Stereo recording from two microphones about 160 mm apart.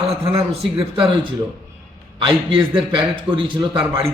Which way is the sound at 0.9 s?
35° right (ahead or behind).